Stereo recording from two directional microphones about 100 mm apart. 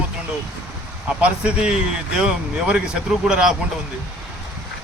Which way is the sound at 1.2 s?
10° right (ahead or behind).